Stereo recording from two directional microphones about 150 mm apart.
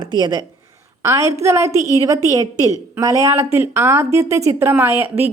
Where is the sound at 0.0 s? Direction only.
25° right (ahead or behind).